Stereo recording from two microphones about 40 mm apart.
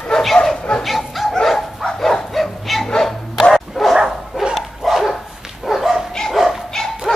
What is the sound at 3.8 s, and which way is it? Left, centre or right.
Dog, centre.